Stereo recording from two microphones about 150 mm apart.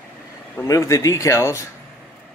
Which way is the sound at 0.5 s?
20° left (ahead or behind).